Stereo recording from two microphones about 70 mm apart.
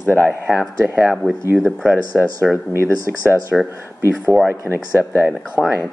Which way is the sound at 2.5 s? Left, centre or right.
Right.